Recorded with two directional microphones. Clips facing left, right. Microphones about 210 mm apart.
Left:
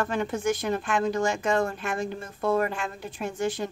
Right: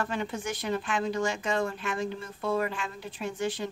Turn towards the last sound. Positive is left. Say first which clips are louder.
# left 3 dB
turn(degrees=45)  # may be behind; listen again after turning